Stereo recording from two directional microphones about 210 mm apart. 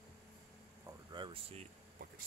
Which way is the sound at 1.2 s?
25° right (ahead or behind).